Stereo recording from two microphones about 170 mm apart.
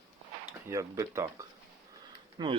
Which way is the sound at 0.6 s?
20° right (ahead or behind).